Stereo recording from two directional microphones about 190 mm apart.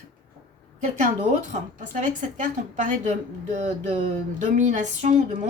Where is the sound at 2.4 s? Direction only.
40° right (ahead or behind).